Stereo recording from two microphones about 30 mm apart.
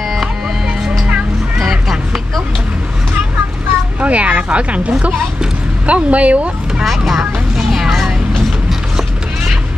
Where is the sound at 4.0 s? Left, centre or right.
Right.